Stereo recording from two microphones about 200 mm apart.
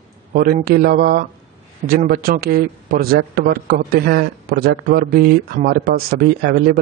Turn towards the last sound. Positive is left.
turn(degrees=-50)  # may be behind; listen again after turning